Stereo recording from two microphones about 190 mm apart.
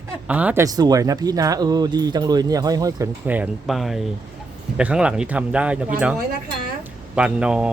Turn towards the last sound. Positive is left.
turn(degrees=-5)  # may be behind; listen again after turning